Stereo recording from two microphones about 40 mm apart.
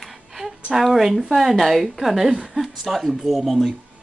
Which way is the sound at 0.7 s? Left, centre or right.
Centre.